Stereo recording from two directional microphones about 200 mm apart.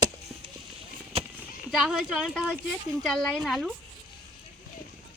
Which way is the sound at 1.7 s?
5° right (ahead or behind).